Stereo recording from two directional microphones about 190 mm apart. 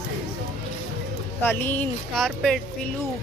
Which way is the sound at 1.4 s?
10° left (ahead or behind).